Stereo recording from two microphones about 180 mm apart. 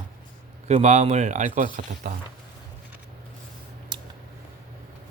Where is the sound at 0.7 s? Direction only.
40° right (ahead or behind).